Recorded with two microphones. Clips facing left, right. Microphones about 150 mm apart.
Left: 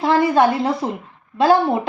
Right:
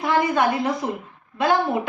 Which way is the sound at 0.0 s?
30° left (ahead or behind).